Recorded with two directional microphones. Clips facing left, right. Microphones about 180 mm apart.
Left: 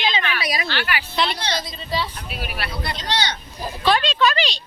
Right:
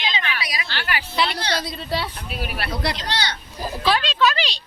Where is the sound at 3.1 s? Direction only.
20° left (ahead or behind).